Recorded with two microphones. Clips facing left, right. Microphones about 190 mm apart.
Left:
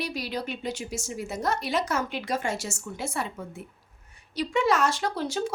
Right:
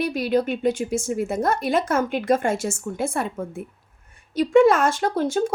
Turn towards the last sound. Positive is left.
turn(degrees=-50)  # may be behind; listen again after turning